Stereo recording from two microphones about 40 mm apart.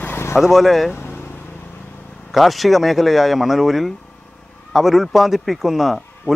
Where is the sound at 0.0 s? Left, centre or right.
Left.